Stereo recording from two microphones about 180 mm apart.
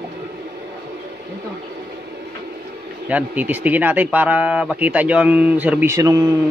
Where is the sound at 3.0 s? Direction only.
10° right (ahead or behind).